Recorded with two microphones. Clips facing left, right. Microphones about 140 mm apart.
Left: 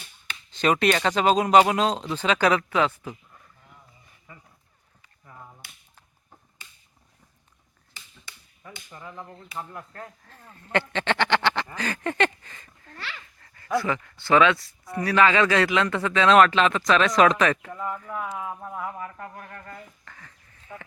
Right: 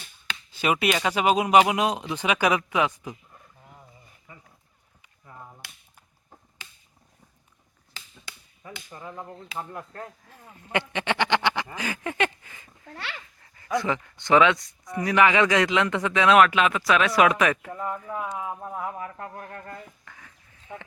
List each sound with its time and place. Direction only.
0.5 s speech: 10° right (ahead or behind)
5.0 s a sound: 15° right (ahead or behind)
6.6 s finger snapping: 90° right
7.9 s finger snapping: 90° right
8.9 s speech: 20° right (ahead or behind)
20.1 s a sound: 10° right (ahead or behind)